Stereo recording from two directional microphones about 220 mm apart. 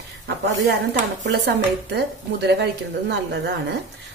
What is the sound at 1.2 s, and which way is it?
A woman's voice, 55° right (ahead or behind).